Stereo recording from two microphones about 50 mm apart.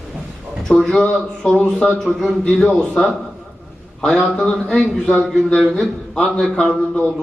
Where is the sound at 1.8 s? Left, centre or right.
Left.